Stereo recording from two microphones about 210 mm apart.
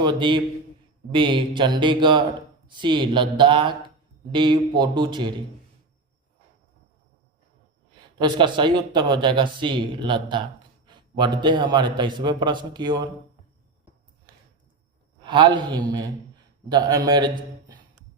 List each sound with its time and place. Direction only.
0.0 s speech: 20° right (ahead or behind)
8.2 s speech: 20° right (ahead or behind)
15.2 s speech: 20° right (ahead or behind)